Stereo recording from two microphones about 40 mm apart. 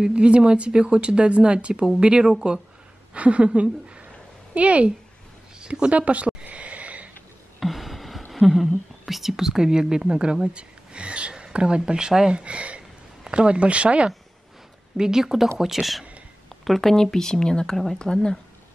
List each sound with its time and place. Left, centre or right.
0.0 s a woman's voice: right
5.6 s sniff: right
7.6 s a sound: centre
8.3 s a woman's voice: centre; by 14.1 s right
15.0 s speech: centre